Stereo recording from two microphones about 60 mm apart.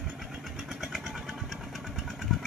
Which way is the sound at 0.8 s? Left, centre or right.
Centre.